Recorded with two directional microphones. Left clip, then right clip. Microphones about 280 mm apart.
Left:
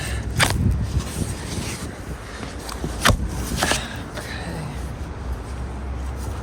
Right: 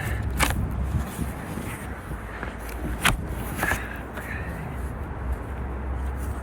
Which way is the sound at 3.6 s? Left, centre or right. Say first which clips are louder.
Left 4 dB; left.